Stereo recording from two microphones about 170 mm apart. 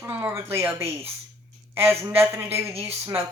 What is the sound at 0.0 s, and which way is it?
A woman's voice, 15° right (ahead or behind).